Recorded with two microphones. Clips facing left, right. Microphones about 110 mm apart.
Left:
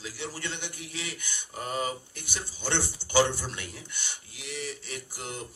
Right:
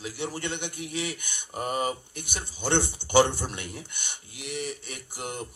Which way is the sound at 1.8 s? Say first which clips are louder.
Right 3 dB; 55° right (ahead or behind).